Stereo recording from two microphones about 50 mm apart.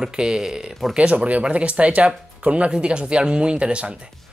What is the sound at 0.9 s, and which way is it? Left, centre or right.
Speech, right.